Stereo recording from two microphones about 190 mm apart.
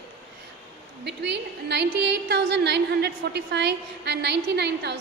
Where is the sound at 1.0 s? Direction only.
65° right (ahead or behind).